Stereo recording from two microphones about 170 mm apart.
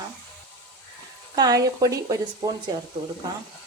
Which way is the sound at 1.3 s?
20° right (ahead or behind).